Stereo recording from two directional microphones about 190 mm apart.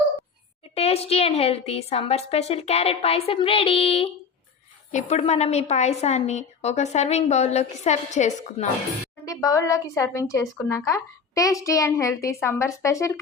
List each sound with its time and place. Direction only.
0.8 s a woman's voice: 30° left (ahead or behind)
9.2 s a woman's voice: 15° left (ahead or behind)